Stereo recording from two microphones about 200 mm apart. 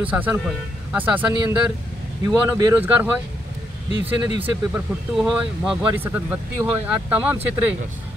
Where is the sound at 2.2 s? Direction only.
20° right (ahead or behind).